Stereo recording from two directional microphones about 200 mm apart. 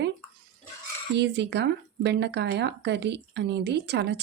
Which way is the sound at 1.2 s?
60° right (ahead or behind).